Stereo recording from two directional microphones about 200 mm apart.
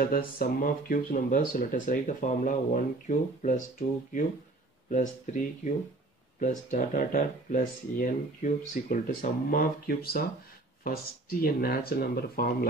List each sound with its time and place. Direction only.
0.0 s speech: 45° left (ahead or behind)